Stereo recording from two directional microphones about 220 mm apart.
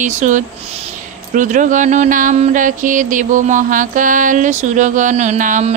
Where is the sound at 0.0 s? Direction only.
35° right (ahead or behind).